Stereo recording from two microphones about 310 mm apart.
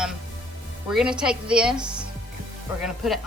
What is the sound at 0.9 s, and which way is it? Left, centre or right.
Speech, centre.